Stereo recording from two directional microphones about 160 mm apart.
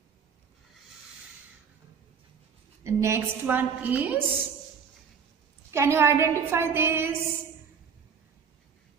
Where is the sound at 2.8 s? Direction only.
20° right (ahead or behind).